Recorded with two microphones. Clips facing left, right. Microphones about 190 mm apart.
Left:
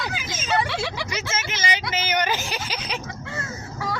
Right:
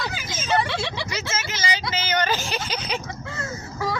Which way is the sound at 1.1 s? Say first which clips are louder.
Even; 20° left (ahead or behind).